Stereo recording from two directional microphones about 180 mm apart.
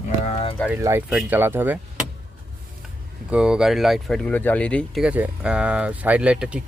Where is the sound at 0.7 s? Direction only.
15° right (ahead or behind).